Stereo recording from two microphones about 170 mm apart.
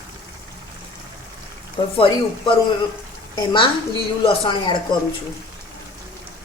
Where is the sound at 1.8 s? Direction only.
30° left (ahead or behind).